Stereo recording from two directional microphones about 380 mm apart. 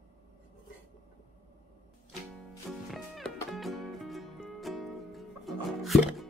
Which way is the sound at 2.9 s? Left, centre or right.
Centre.